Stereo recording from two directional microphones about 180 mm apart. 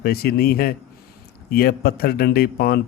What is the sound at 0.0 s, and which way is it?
A man's voice, 60° left (ahead or behind).